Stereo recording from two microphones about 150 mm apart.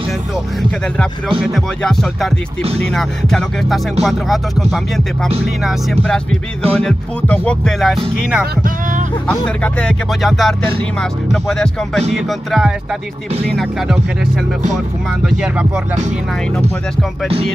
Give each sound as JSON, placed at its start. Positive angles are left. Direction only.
{"t": 1.4, "sound": "music", "side_deg": 0}
{"t": 6.8, "sound": "music", "side_deg": 5}
{"t": 9.6, "sound": "music", "side_deg": 5}